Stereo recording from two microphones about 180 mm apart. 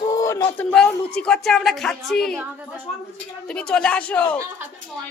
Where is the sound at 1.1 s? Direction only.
5° left (ahead or behind).